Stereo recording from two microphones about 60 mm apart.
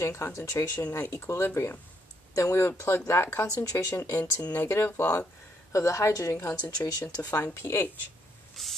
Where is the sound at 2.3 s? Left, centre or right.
Left.